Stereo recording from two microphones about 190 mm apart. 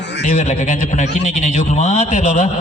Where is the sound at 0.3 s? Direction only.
40° left (ahead or behind).